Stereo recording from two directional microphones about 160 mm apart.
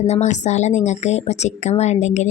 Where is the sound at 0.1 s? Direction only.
45° left (ahead or behind).